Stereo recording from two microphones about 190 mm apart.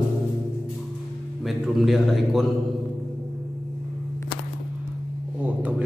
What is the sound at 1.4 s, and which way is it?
A man's voice, centre (ahead or behind).